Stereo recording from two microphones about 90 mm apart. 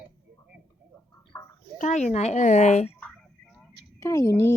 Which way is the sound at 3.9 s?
40° left (ahead or behind).